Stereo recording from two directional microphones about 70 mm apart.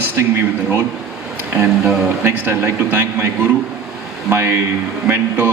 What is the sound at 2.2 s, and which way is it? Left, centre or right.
A man's voice, right.